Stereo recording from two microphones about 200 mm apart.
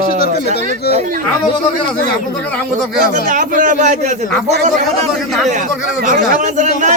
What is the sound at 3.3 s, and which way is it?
A man's voice, 40° right (ahead or behind).